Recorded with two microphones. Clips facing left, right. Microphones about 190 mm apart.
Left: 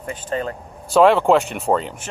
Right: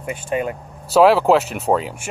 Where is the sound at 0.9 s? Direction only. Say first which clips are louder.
Right 1 dB; 5° right (ahead or behind).